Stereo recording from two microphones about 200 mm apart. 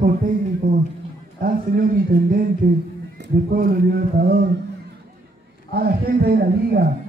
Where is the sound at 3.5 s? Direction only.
50° right (ahead or behind).